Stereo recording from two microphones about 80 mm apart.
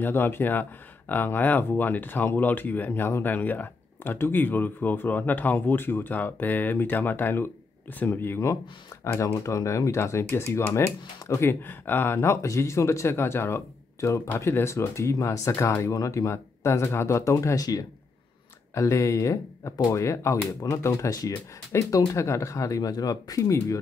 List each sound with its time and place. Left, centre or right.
0.0 s speech: left
9.0 s speech: left
18.8 s speech: left
21.7 s speech: left